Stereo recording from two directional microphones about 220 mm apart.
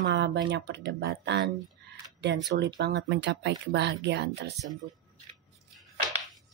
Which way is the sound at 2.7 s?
50° right (ahead or behind).